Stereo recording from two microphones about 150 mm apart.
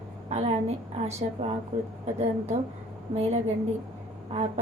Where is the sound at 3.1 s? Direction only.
45° right (ahead or behind).